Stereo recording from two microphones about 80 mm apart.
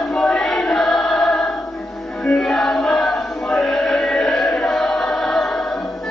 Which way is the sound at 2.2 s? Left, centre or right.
Centre.